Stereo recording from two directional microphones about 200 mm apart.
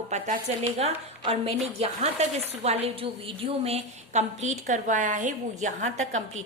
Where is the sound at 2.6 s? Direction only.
30° right (ahead or behind).